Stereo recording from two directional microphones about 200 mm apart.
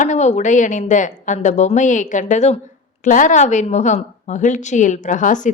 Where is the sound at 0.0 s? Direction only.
35° left (ahead or behind).